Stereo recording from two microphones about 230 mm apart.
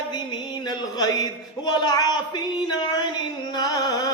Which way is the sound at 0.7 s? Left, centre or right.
Centre.